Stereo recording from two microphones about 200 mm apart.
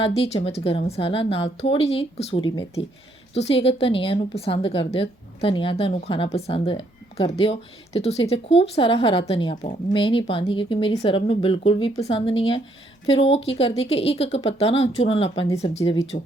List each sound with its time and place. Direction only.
0.0 s a woman's voice: 30° left (ahead or behind)
15.8 s speech: 15° left (ahead or behind)